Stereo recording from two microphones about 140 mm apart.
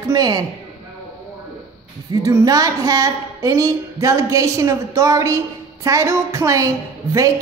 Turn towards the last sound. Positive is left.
turn(degrees=-25)  # may be behind; listen again after turning